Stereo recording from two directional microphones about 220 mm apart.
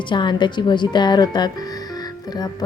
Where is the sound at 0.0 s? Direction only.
20° left (ahead or behind).